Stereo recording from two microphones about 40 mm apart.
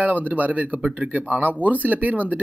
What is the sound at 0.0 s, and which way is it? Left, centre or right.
Speech, right.